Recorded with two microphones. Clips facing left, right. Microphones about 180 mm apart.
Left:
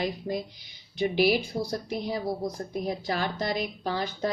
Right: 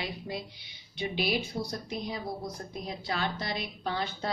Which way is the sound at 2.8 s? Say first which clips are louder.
Left 3 dB; 50° left (ahead or behind).